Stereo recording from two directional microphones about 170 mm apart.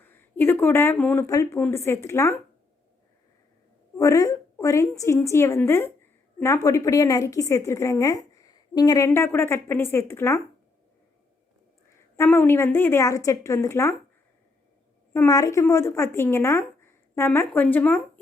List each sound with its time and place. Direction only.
0.0 s a woman's voice: 10° left (ahead or behind)
3.9 s a woman's voice: 20° left (ahead or behind)
12.1 s a woman's voice: 15° left (ahead or behind)
15.1 s a woman's voice: 20° left (ahead or behind)